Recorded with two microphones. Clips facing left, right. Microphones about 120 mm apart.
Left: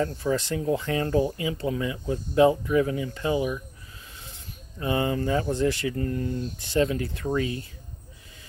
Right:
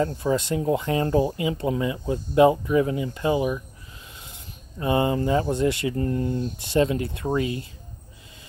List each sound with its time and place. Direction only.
0.0 s speech: 25° right (ahead or behind)
4.7 s speech: 25° right (ahead or behind)